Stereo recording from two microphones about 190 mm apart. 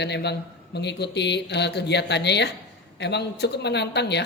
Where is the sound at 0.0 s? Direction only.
60° left (ahead or behind).